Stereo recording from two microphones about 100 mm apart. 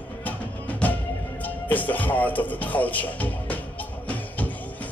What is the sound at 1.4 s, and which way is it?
Speech, 15° left (ahead or behind).